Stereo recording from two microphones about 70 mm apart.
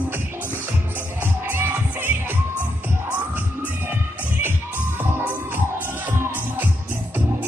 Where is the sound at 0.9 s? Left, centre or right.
Right.